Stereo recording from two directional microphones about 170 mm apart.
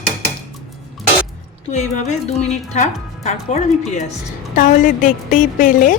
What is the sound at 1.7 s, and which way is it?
A woman's voice, 45° left (ahead or behind).